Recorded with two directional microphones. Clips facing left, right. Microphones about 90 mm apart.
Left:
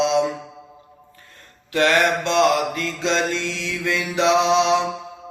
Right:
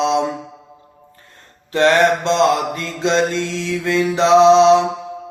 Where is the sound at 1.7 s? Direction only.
30° right (ahead or behind).